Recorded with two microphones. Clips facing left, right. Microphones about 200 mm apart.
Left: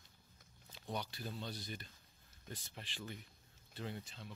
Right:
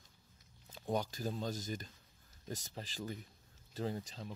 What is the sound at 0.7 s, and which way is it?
Speech, 45° right (ahead or behind).